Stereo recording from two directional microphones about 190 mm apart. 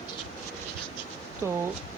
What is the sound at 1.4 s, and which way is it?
Speech, 15° right (ahead or behind).